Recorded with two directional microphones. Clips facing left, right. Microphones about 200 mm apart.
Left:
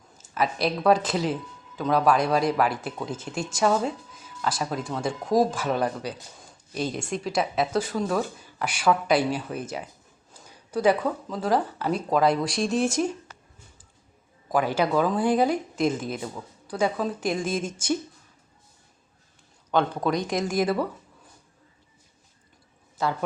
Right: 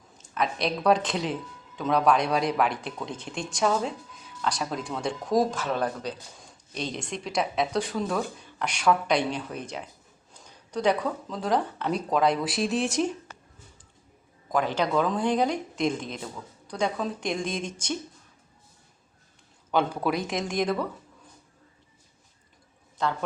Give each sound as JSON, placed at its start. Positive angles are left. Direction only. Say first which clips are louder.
{"t": 0.2, "sound": "speech", "louder": "left 2 dB", "side_deg": 5}
{"t": 14.5, "sound": "speech", "louder": "left 2 dB", "side_deg": 10}
{"t": 19.7, "sound": "speech", "louder": "left 2 dB", "side_deg": -5}
{"t": 23.0, "sound": "speech", "louder": "left 1 dB", "side_deg": 5}